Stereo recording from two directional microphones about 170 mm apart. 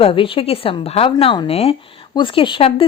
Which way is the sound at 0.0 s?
30° left (ahead or behind).